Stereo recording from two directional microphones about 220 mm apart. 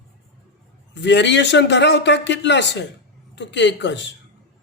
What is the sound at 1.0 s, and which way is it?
A man's voice, 55° left (ahead or behind).